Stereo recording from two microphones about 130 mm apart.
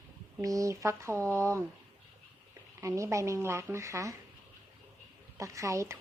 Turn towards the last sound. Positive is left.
turn(degrees=-25)  # may be behind; listen again after turning